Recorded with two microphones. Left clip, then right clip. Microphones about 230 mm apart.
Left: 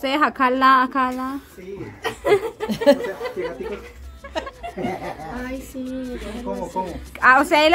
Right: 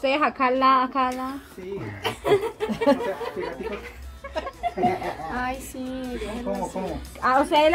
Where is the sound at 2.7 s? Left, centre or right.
Left.